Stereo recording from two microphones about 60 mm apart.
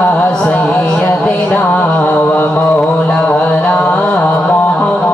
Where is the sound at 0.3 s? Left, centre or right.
Centre.